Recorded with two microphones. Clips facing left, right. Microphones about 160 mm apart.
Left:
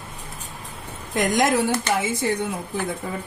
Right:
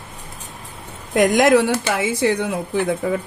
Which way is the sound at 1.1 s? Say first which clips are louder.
Right 6 dB; 70° right (ahead or behind).